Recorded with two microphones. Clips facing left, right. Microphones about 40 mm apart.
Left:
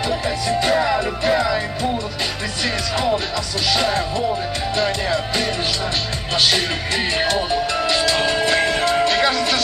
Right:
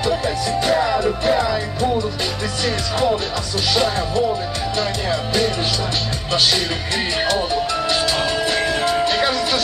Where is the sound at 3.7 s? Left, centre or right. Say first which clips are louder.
Even; left.